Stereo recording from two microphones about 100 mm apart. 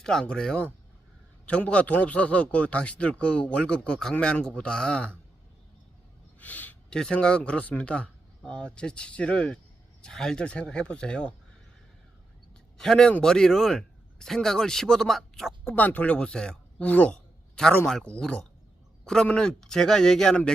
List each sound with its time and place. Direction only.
0.0 s speech: 5° left (ahead or behind)
6.4 s a man's voice: 15° left (ahead or behind)
12.7 s a man's voice: 5° left (ahead or behind)
15.6 s speech: 20° left (ahead or behind)